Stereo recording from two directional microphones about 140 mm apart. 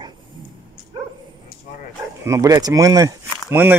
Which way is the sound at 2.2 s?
20° right (ahead or behind).